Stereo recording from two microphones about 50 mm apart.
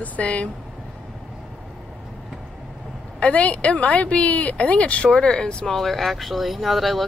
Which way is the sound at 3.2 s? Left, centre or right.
Left.